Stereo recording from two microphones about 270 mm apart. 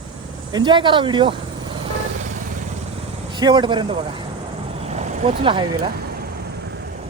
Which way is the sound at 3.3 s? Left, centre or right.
Centre.